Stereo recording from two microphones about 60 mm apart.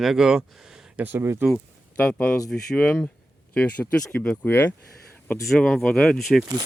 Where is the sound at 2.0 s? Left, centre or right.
Left.